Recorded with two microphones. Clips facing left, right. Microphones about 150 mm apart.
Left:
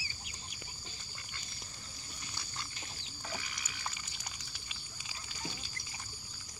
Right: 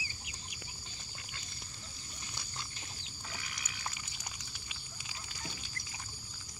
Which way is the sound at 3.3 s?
5° right (ahead or behind).